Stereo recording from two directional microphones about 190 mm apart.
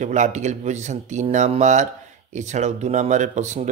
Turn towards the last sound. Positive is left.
turn(degrees=-40)  # may be behind; listen again after turning